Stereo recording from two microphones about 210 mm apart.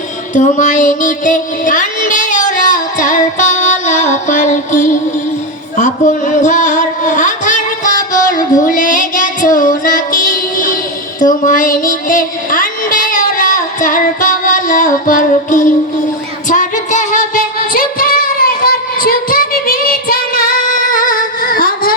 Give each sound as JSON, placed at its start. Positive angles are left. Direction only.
{"t": 0.3, "sound": "child singing", "side_deg": 35}
{"t": 5.7, "sound": "a sound", "side_deg": 35}
{"t": 11.2, "sound": "music", "side_deg": 40}
{"t": 16.5, "sound": "singing", "side_deg": 35}